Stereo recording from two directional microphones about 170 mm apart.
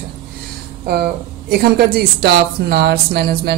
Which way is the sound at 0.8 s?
65° right (ahead or behind).